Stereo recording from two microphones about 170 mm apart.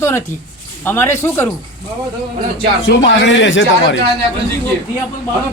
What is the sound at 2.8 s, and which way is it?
Speech, 90° left.